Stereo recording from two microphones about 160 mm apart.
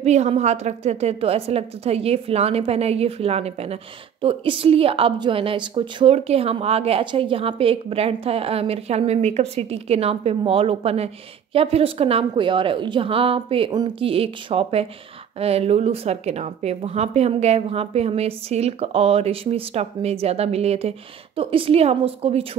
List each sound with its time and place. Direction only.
0.0 s a woman's voice: 45° right (ahead or behind)